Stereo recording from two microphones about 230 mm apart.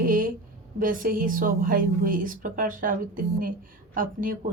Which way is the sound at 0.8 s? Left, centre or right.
Right.